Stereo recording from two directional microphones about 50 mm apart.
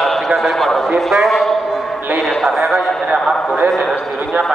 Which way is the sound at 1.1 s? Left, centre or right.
Centre.